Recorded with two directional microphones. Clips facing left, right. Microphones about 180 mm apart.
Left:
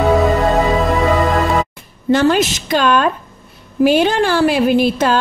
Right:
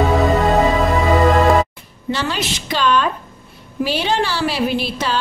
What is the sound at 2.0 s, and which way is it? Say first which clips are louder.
Speech: left 9 dB; 50° left (ahead or behind).